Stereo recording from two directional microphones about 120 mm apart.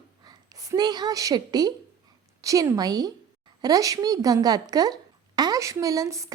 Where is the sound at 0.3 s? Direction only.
30° right (ahead or behind).